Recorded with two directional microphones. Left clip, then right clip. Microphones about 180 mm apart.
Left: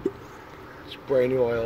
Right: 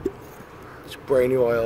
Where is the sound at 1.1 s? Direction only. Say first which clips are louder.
Right 3 dB; 25° right (ahead or behind).